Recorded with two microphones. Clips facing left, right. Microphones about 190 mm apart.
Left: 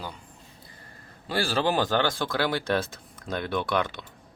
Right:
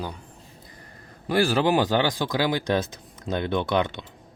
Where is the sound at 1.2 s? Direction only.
15° right (ahead or behind).